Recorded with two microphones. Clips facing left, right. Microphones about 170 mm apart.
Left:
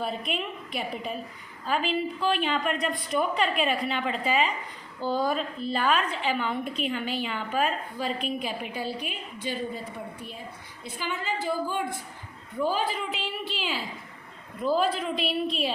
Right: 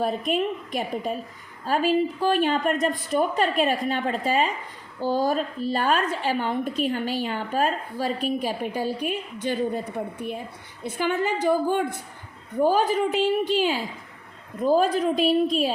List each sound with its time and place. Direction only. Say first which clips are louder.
0.0 s a woman's voice: right 7 dB; 45° right (ahead or behind)
10.9 s a woman's voice: right 7 dB; 50° right (ahead or behind)